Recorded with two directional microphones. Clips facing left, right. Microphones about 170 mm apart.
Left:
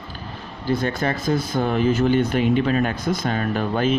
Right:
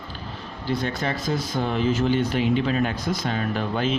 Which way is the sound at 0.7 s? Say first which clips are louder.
Left 4 dB; 50° left (ahead or behind).